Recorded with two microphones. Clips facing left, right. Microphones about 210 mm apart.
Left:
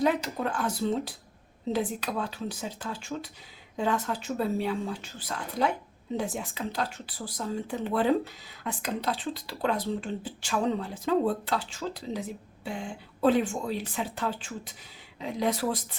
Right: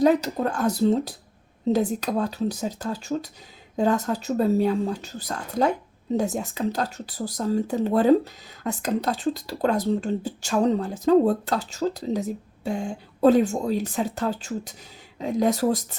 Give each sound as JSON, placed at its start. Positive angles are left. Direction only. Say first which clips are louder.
{"t": 0.0, "sound": "speech", "louder": "right 7 dB", "side_deg": -40}